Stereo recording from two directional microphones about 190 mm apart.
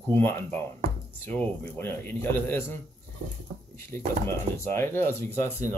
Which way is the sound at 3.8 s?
15° left (ahead or behind).